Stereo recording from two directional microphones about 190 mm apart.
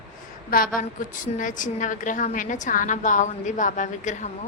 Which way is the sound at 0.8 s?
45° left (ahead or behind).